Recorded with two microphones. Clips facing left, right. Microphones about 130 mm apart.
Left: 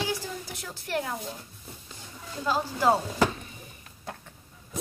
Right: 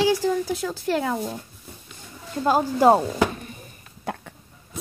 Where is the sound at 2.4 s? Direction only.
50° right (ahead or behind).